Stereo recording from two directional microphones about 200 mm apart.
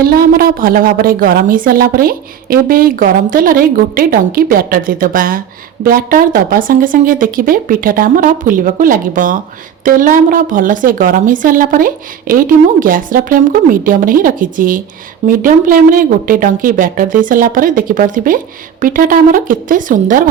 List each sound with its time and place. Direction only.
0.0 s a woman's voice: 45° right (ahead or behind)